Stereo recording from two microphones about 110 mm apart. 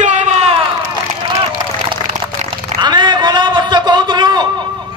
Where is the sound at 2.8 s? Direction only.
45° right (ahead or behind).